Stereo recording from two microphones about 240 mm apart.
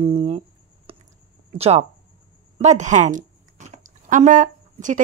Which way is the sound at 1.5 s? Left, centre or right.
Right.